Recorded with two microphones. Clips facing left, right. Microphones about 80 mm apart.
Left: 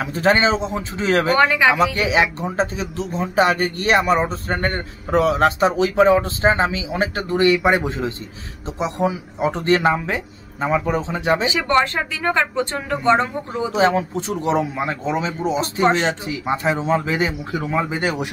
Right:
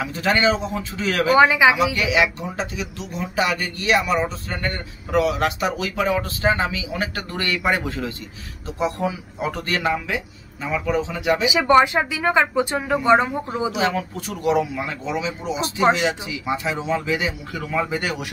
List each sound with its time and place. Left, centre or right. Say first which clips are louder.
0.0 s speech: left 3 dB; left
1.3 s speech: right 4 dB; centre
2.0 s speech: left 2 dB; left
11.4 s speech: right 3 dB; centre
13.7 s speech: left 5 dB; left
17.6 s speech: left 2 dB; left